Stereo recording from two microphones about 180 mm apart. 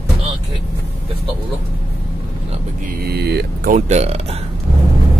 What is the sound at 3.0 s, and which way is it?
Vehicle, 65° right (ahead or behind).